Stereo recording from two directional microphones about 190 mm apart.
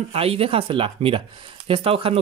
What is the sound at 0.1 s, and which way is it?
Speech, 30° right (ahead or behind).